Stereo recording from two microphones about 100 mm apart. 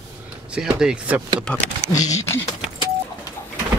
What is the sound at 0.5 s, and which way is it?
Speech, 5° right (ahead or behind).